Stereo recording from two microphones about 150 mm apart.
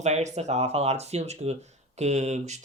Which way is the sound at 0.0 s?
50° right (ahead or behind).